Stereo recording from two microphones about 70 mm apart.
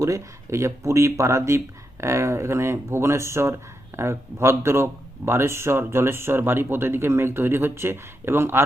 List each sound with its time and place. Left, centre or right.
0.0 s speech: right